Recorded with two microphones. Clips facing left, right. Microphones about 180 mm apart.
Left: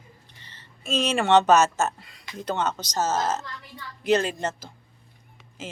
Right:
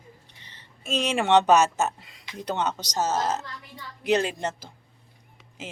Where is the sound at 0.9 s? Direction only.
15° right (ahead or behind).